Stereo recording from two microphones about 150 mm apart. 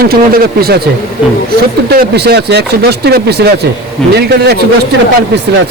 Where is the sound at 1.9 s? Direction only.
90° right.